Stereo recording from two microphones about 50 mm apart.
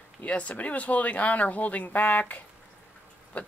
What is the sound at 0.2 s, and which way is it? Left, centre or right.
Speech, left.